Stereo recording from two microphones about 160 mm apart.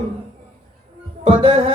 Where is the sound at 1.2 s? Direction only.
35° right (ahead or behind).